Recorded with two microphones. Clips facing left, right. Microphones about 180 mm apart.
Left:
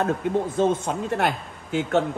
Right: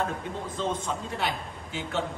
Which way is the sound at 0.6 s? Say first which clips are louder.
Left 8 dB; 60° left (ahead or behind).